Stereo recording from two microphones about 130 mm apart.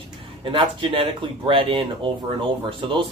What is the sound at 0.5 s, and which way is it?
Speech, 40° right (ahead or behind).